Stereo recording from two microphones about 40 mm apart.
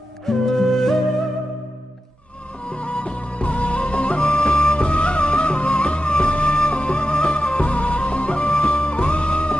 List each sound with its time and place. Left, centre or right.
0.3 s music: centre
2.6 s music: left